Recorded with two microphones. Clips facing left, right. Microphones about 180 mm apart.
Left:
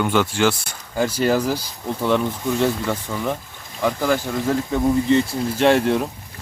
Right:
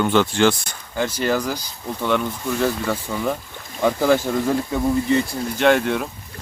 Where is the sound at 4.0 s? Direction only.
15° right (ahead or behind).